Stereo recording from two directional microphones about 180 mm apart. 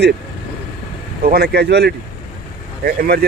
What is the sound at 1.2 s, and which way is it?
Speech, 60° right (ahead or behind).